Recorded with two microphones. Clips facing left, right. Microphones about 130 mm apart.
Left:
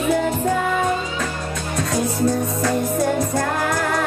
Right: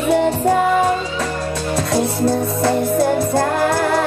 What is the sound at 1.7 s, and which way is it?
Music, 30° right (ahead or behind).